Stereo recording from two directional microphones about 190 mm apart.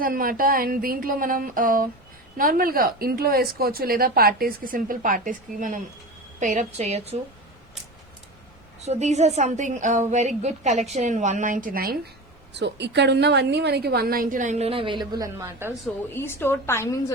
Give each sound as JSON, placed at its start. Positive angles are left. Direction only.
{"t": 0.0, "sound": "a woman's voice", "side_deg": -50}
{"t": 8.8, "sound": "a woman's voice", "side_deg": -35}
{"t": 12.5, "sound": "a woman's voice", "side_deg": -65}
{"t": 16.1, "sound": "a woman's voice", "side_deg": 10}